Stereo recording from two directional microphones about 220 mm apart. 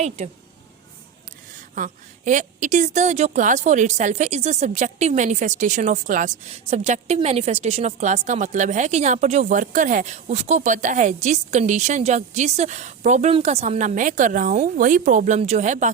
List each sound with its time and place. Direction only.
1.7 s a woman's voice: 35° right (ahead or behind)